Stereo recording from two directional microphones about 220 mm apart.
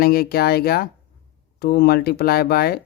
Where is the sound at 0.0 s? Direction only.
45° left (ahead or behind).